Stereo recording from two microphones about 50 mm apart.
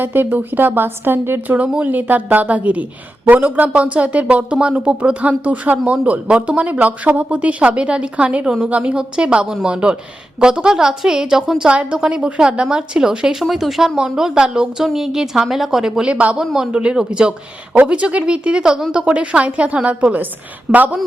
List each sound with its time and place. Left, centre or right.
0.0 s a woman's voice: right
1.5 s a woman's voice: right
8.4 s speech: centre
11.7 s speech: right; by 16.0 s centre
16.0 s a woman's voice: right